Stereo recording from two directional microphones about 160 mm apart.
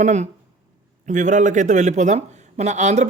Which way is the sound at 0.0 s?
45° right (ahead or behind).